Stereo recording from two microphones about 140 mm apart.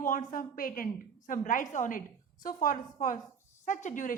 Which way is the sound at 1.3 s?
70° left (ahead or behind).